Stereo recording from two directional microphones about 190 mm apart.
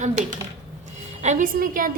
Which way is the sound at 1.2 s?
40° right (ahead or behind).